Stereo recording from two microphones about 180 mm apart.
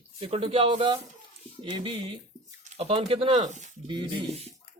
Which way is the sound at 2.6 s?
35° right (ahead or behind).